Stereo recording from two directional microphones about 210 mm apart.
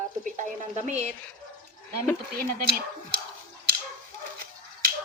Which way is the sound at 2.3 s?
45° right (ahead or behind).